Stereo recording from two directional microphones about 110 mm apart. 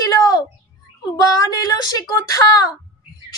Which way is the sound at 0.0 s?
35° left (ahead or behind).